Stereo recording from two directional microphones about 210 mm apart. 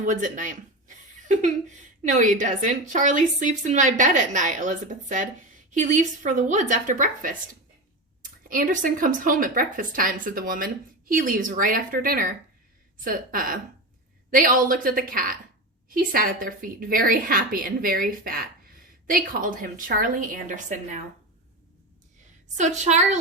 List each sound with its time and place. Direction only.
0.0 s speech: 40° right (ahead or behind)
22.5 s speech: 35° right (ahead or behind)